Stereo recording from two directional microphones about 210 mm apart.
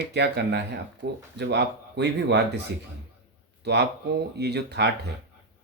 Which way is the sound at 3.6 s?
50° right (ahead or behind).